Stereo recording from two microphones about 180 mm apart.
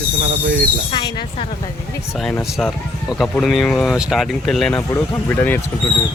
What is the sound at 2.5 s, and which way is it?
Speech, centre (ahead or behind).